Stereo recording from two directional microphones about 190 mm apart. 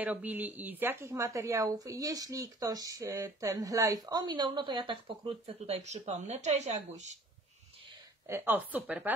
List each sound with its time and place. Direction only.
0.0 s speech: 10° right (ahead or behind); by 7.1 s 40° right (ahead or behind)
8.3 s a woman's voice: 10° right (ahead or behind)